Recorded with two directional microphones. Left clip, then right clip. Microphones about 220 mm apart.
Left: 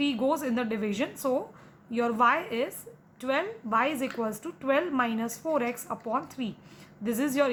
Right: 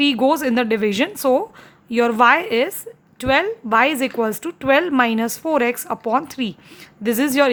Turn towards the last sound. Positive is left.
turn(degrees=-45)  # may be behind; listen again after turning